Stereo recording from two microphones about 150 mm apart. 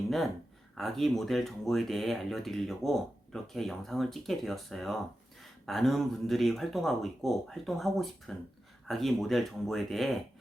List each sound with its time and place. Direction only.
0.8 s speech: centre (ahead or behind)